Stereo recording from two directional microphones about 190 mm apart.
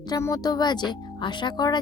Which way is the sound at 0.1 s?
15° left (ahead or behind).